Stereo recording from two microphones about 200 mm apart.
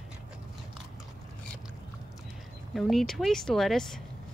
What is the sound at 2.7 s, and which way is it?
Speech, centre (ahead or behind).